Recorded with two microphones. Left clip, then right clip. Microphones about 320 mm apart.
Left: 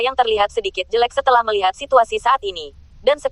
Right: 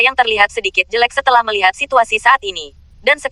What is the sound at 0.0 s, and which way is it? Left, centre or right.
Speech, right.